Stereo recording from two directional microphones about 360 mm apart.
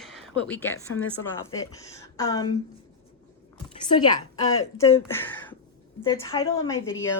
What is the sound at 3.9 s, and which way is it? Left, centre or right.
A woman's voice, centre.